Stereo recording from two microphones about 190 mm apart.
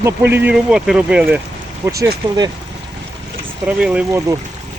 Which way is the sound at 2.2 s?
25° right (ahead or behind).